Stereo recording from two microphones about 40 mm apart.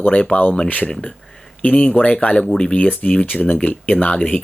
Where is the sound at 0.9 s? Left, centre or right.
Left.